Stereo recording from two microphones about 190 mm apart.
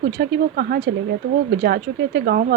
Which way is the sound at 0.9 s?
55° right (ahead or behind).